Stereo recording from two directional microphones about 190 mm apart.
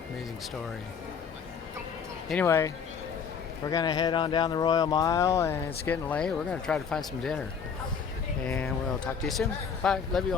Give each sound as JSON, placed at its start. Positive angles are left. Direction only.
{"t": 2.3, "sound": "speech", "side_deg": 10}
{"t": 8.4, "sound": "speech", "side_deg": 5}